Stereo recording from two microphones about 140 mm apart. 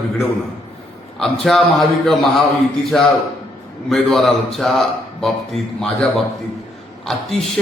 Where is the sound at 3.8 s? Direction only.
Centre (ahead or behind).